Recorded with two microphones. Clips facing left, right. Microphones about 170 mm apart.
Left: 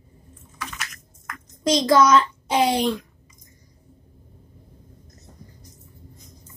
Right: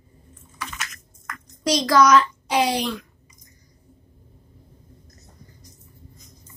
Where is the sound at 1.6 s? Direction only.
25° left (ahead or behind).